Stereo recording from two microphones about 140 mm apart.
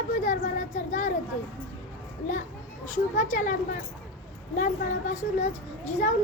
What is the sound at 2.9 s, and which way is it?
Speech, 65° left (ahead or behind).